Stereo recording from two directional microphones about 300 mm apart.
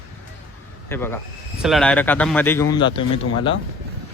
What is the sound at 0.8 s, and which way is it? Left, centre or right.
Speech, centre.